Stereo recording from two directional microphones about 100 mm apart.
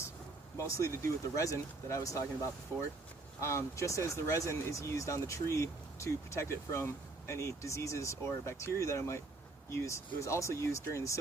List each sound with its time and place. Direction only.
0.5 s speech: 30° left (ahead or behind)
3.4 s speech: 30° left (ahead or behind)